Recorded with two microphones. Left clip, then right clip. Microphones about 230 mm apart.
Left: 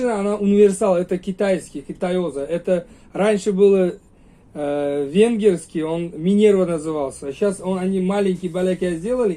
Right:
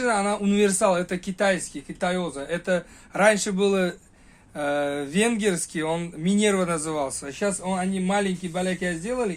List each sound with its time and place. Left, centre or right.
0.0 s speech: right